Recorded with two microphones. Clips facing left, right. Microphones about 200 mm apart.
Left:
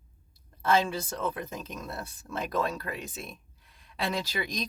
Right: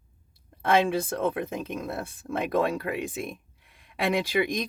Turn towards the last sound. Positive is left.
turn(degrees=-55)  # may be behind; listen again after turning